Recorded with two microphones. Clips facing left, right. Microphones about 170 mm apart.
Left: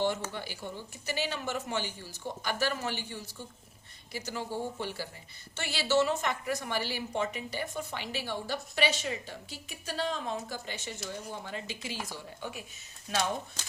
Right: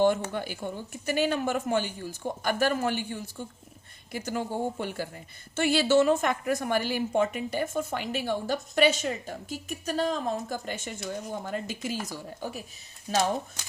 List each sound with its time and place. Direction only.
0.0 s a woman's voice: 55° right (ahead or behind); by 13.3 s 35° right (ahead or behind)